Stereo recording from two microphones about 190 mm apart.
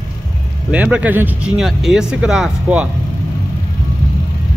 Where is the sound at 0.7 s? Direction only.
10° right (ahead or behind).